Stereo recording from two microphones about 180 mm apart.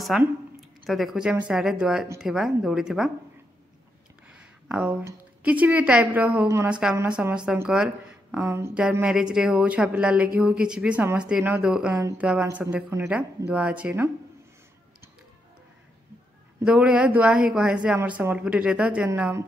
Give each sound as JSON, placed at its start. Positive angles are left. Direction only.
{"t": 0.0, "sound": "a woman's voice", "side_deg": 0}
{"t": 4.6, "sound": "a woman's voice", "side_deg": -5}
{"t": 16.6, "sound": "speech", "side_deg": -5}